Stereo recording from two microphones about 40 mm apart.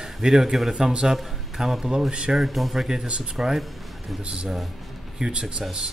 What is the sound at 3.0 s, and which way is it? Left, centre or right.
Speech, right.